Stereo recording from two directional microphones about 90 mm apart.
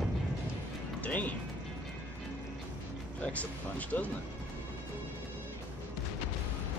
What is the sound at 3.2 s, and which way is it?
Speech, 15° left (ahead or behind).